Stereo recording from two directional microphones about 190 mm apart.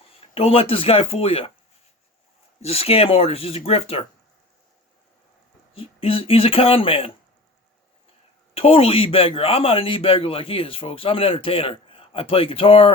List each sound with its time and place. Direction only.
0.2 s speech: 30° left (ahead or behind)
2.6 s speech: 30° left (ahead or behind)
5.7 s speech: 30° left (ahead or behind)
8.5 s speech: 30° left (ahead or behind)